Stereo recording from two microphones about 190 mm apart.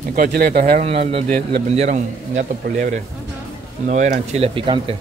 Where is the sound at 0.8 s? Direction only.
35° right (ahead or behind).